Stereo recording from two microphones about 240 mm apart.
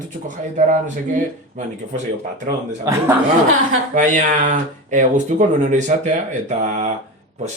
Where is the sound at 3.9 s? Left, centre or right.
Right.